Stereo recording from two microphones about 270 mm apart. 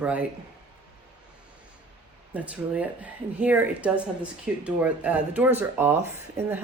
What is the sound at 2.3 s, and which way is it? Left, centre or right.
Speech, centre.